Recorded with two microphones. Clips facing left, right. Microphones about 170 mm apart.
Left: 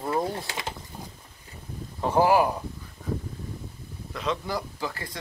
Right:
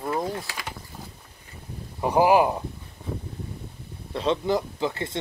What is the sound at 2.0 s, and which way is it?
Speech, 15° right (ahead or behind).